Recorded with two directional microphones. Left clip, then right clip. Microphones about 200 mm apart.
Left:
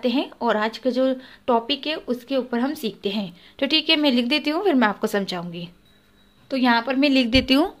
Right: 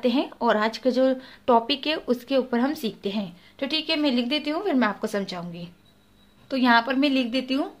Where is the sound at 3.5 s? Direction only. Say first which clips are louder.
Left 6 dB; 30° left (ahead or behind); by 7.1 s 10° left (ahead or behind).